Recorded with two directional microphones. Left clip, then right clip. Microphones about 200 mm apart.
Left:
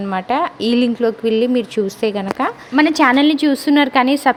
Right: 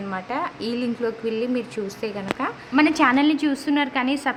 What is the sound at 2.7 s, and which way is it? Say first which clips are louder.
A woman's voice: left 5 dB; 25° left (ahead or behind).